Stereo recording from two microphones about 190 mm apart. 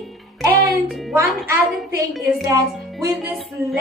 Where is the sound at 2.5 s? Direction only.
15° right (ahead or behind).